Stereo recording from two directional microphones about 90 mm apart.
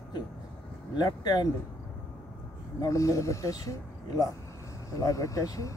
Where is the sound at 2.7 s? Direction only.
40° left (ahead or behind).